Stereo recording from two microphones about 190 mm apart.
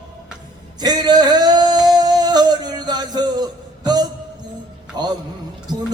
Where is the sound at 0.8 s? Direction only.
20° right (ahead or behind).